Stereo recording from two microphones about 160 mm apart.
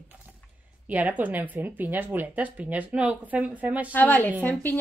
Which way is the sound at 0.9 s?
10° right (ahead or behind).